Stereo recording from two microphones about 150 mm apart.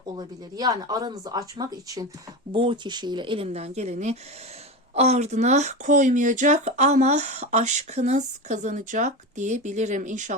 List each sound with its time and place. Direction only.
0.2 s speech: 25° right (ahead or behind)
2.5 s speech: 35° right (ahead or behind); by 10.3 s 55° right (ahead or behind)